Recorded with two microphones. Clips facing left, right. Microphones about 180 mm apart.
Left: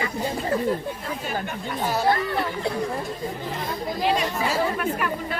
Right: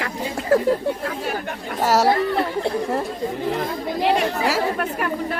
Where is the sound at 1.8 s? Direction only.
85° right.